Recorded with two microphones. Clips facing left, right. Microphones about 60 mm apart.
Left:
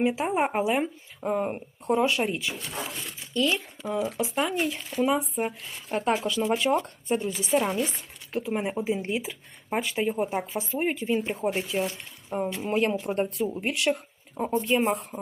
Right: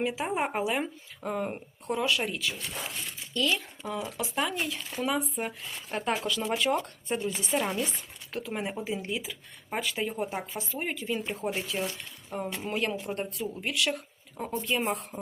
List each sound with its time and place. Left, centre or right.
0.0 s speech: left
13.3 s speech: left
14.8 s speech: centre